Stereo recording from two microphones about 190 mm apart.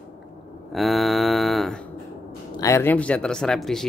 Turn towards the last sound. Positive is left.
turn(degrees=0)  # may be behind; listen again after turning